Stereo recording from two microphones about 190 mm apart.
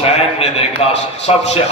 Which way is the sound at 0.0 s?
30° left (ahead or behind).